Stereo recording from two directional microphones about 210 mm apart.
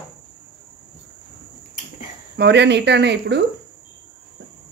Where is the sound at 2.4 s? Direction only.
55° right (ahead or behind).